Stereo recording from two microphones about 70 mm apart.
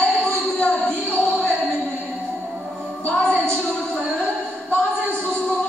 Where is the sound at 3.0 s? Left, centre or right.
Centre.